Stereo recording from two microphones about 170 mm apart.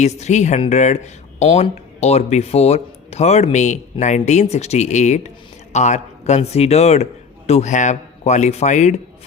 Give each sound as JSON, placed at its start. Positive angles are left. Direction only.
{"t": 0.0, "sound": "a man's voice", "side_deg": 40}